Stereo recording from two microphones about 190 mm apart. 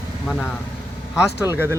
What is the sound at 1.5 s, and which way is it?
Speech, 15° right (ahead or behind).